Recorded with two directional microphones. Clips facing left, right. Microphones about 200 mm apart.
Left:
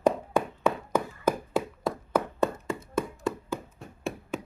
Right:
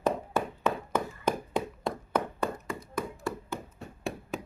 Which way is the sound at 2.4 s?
25° left (ahead or behind).